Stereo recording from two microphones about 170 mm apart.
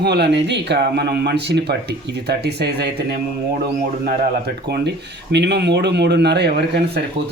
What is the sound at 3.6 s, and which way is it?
Speech, 60° right (ahead or behind).